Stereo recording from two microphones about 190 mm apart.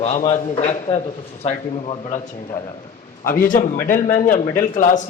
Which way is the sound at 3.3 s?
45° left (ahead or behind).